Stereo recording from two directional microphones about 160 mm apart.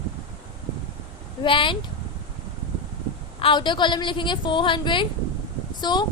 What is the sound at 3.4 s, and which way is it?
A woman's voice, 30° left (ahead or behind).